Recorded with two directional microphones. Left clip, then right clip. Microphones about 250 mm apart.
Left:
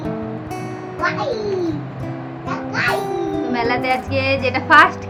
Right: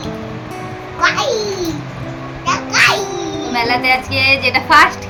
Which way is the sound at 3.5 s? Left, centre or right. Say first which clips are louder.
Right 6 dB; centre.